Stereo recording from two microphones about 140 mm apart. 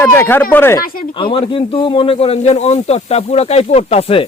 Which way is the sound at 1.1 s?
40° left (ahead or behind).